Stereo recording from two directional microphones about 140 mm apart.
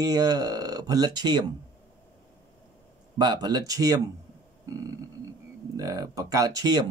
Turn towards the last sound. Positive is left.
turn(degrees=-30)  # may be behind; listen again after turning